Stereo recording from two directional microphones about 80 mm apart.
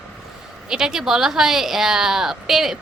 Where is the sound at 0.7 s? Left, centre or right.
Centre.